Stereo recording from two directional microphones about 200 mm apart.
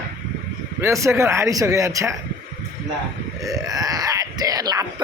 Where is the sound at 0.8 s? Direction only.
15° right (ahead or behind).